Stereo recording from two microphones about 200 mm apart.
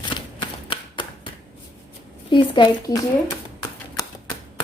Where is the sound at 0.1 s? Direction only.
25° left (ahead or behind).